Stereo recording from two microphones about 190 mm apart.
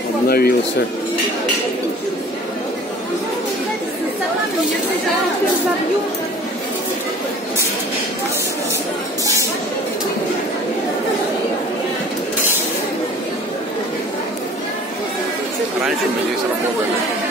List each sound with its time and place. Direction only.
0.3 s speech: 55° left (ahead or behind)